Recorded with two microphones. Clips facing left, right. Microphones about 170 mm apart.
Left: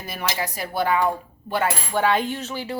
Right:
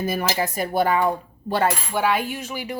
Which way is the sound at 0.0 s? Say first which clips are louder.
Right 5 dB; 50° right (ahead or behind).